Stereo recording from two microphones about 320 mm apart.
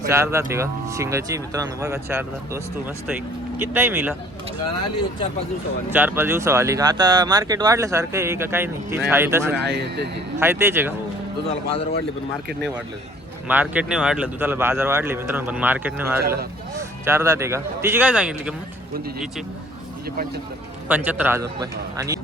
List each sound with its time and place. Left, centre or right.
0.1 s speech: centre
3.6 s speech: centre
5.9 s speech: centre
9.6 s speech: right
10.4 s speech: centre
13.5 s speech: centre
16.2 s speech: right
16.7 s speech: centre
20.8 s speech: centre